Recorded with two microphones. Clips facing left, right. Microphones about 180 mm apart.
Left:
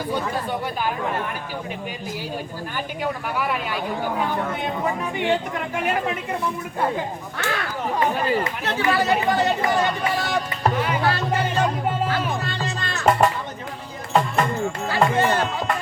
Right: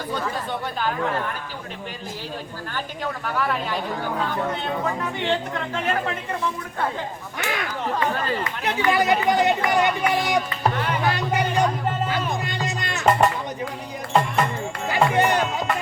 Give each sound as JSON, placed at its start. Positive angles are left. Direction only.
{"t": 2.7, "sound": "speech", "side_deg": 10}
{"t": 7.3, "sound": "speech", "side_deg": -15}
{"t": 7.9, "sound": "speech", "side_deg": 10}
{"t": 8.6, "sound": "speech", "side_deg": -15}
{"t": 10.6, "sound": "music", "side_deg": 0}
{"t": 11.0, "sound": "music", "side_deg": -15}
{"t": 13.1, "sound": "music", "side_deg": 0}
{"t": 14.8, "sound": "music", "side_deg": -15}